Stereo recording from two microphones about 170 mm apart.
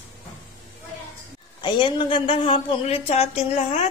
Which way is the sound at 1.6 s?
30° left (ahead or behind).